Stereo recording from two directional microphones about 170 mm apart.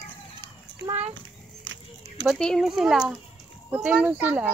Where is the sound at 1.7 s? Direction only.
90° right.